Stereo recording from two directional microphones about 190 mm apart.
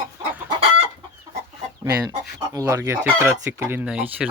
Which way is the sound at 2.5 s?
15° right (ahead or behind).